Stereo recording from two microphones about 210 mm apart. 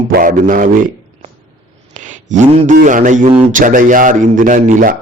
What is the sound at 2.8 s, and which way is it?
A man's voice, 40° right (ahead or behind).